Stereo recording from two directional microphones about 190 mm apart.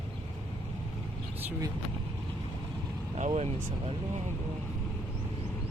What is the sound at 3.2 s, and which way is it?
Speech, 35° right (ahead or behind).